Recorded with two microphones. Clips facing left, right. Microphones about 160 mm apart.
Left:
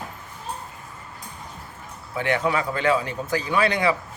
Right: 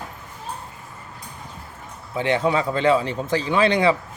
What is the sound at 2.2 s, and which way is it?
Speech, 20° right (ahead or behind).